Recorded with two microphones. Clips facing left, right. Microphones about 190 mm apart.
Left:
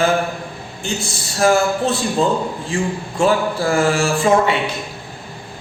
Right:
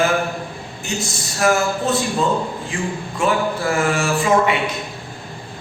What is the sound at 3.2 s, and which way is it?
Speech, 30° left (ahead or behind).